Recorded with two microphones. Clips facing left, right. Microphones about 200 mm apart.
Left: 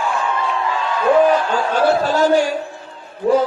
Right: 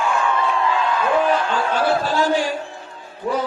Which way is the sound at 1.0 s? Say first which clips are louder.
Left 8 dB; 40° left (ahead or behind).